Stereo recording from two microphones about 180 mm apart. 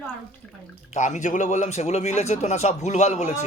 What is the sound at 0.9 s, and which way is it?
A man's voice, 40° left (ahead or behind).